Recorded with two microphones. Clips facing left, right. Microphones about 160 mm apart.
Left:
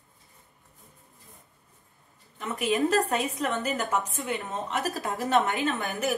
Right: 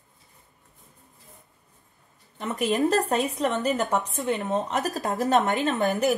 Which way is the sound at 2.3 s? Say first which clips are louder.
Right 2 dB; 35° right (ahead or behind).